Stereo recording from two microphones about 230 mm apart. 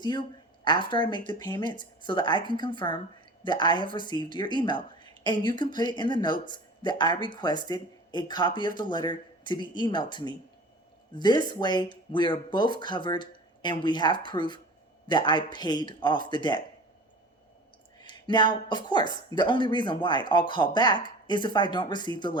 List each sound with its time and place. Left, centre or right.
0.0 s speech: centre
18.0 s speech: centre